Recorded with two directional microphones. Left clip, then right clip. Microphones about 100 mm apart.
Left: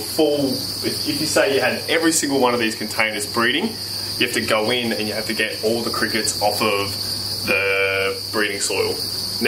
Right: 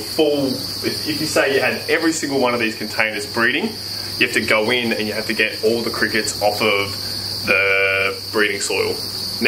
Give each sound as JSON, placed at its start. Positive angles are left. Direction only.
{"t": 1.3, "sound": "speech", "side_deg": 20}
{"t": 4.2, "sound": "cricket", "side_deg": 10}
{"t": 5.9, "sound": "cricket", "side_deg": 10}
{"t": 7.4, "sound": "speech", "side_deg": 5}